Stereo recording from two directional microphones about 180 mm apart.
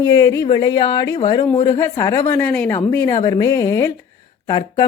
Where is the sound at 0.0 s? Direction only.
20° left (ahead or behind).